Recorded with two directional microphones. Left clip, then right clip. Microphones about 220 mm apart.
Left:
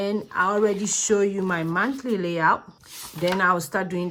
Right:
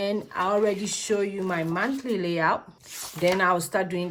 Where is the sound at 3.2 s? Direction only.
15° left (ahead or behind).